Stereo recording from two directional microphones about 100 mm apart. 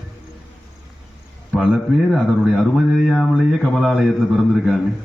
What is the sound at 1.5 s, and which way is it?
Speech, 5° left (ahead or behind).